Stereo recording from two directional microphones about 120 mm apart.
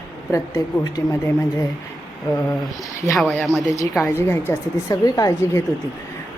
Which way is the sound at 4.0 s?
20° left (ahead or behind).